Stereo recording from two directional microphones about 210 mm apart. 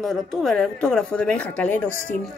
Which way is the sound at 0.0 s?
Centre (ahead or behind).